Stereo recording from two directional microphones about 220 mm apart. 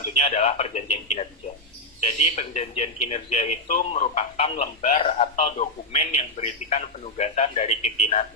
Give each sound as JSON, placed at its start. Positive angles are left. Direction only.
{"t": 0.2, "sound": "speech", "side_deg": 30}
{"t": 2.3, "sound": "speech", "side_deg": 30}